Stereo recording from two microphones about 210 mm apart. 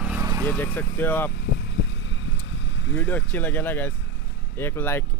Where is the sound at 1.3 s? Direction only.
60° left (ahead or behind).